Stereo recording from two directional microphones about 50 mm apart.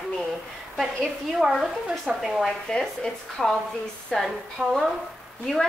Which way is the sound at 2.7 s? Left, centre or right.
Centre.